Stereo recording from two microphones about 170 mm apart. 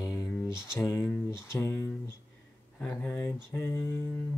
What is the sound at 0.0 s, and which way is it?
Speech, 20° left (ahead or behind).